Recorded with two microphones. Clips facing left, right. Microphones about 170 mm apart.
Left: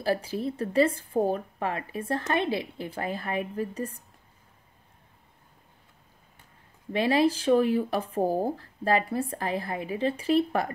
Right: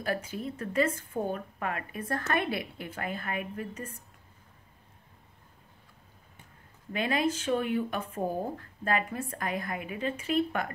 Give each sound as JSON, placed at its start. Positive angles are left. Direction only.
{"t": 0.0, "sound": "a woman's voice", "side_deg": 35}
{"t": 6.9, "sound": "a woman's voice", "side_deg": 35}